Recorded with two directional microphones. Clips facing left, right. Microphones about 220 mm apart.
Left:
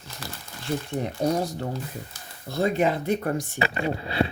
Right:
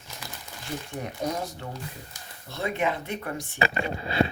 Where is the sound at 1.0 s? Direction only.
35° left (ahead or behind).